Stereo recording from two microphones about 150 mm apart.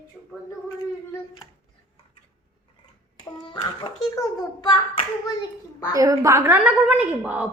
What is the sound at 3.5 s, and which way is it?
Speech, 35° left (ahead or behind).